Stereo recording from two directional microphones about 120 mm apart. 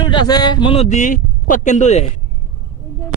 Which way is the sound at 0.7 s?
65° left (ahead or behind).